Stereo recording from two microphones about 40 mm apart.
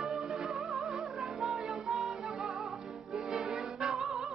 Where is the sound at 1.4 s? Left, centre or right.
Centre.